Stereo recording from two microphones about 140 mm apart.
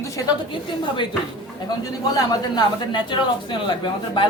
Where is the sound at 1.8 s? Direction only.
25° left (ahead or behind).